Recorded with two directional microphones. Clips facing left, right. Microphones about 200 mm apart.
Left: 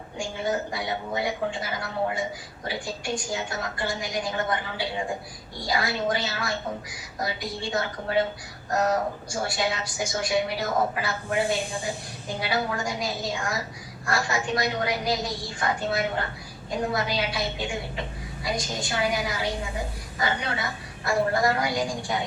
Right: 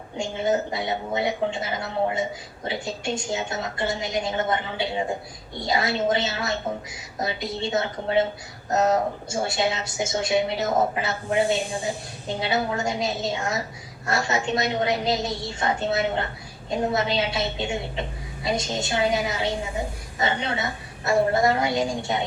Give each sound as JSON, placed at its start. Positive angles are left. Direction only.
{"t": 0.2, "sound": "a woman's voice", "side_deg": -20}